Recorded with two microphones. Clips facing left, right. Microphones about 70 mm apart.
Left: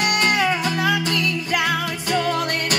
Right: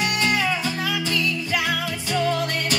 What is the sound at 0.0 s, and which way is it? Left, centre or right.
Music, left.